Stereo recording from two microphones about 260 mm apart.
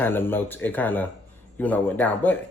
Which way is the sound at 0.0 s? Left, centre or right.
Centre.